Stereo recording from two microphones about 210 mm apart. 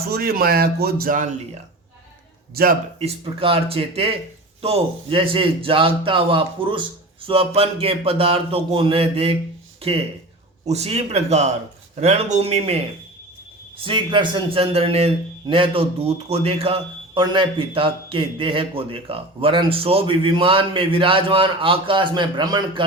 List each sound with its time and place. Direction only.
0.1 s speech: 45° right (ahead or behind)
2.6 s speech: 45° right (ahead or behind)
3.0 s a man's voice: 25° right (ahead or behind)
10.7 s a man's voice: 30° right (ahead or behind)